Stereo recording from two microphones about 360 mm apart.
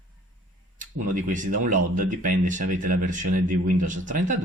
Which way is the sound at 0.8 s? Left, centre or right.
Right.